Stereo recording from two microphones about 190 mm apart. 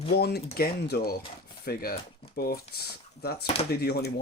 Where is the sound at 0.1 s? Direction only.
60° left (ahead or behind).